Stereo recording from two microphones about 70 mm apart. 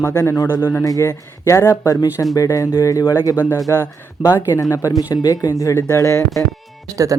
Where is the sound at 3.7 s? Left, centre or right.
Left.